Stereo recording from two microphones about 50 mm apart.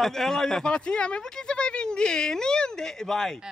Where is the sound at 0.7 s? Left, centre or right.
Left.